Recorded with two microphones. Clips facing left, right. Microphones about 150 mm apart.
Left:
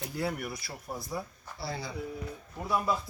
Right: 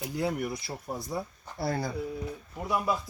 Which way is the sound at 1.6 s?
50° right (ahead or behind).